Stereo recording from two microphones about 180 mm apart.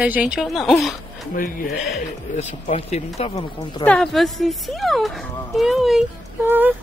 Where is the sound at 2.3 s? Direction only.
40° left (ahead or behind).